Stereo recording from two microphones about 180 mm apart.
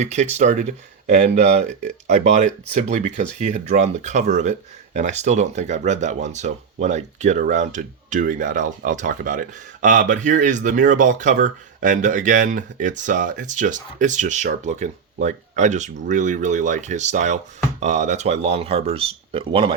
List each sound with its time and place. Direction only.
0.0 s speech: 40° right (ahead or behind)